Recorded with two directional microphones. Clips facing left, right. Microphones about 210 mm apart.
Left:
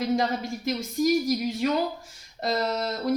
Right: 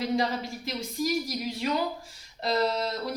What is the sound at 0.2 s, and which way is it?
A woman's voice, 45° left (ahead or behind).